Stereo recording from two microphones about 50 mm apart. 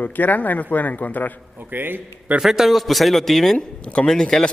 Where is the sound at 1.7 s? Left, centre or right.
Right.